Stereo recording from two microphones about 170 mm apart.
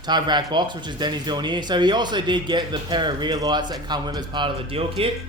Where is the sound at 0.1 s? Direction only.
25° right (ahead or behind).